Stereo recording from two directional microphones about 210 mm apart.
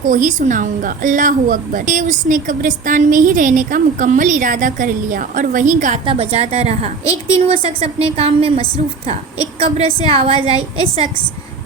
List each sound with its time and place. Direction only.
0.1 s a woman's voice: 40° right (ahead or behind)